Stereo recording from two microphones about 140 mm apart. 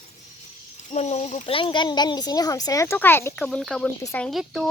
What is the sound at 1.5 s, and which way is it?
Speech, 35° left (ahead or behind).